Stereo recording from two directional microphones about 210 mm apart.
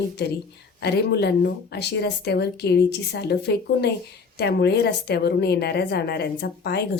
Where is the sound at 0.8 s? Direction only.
55° left (ahead or behind).